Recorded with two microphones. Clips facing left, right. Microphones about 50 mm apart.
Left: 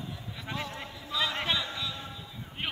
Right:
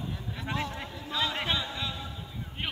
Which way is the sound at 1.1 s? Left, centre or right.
Right.